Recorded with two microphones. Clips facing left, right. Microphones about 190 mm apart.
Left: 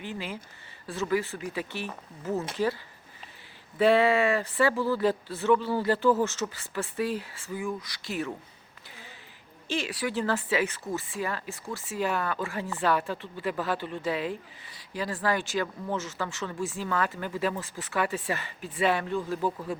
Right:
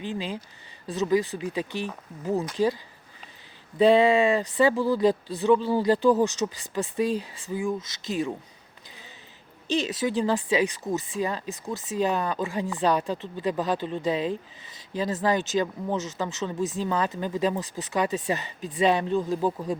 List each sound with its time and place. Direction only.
0.0 s speech: 20° right (ahead or behind)
3.8 s speech: 20° right (ahead or behind)
9.6 s speech: 20° right (ahead or behind)